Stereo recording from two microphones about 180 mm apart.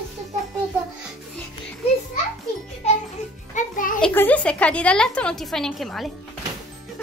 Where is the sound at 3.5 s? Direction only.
45° left (ahead or behind).